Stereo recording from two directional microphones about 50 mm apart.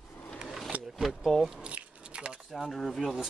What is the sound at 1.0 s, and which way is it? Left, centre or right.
Speech, centre.